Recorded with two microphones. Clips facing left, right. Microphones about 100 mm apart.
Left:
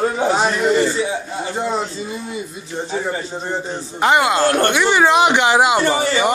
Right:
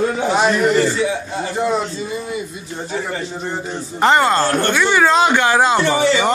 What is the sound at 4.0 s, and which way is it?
Speech, 10° left (ahead or behind).